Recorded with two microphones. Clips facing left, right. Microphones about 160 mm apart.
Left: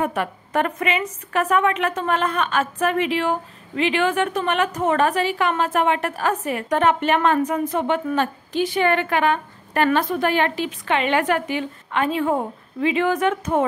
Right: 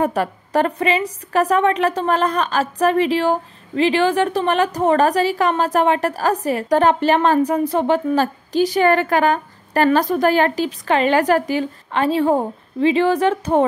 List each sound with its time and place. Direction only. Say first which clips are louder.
0.0 s a woman's voice: right 4 dB; 35° right (ahead or behind)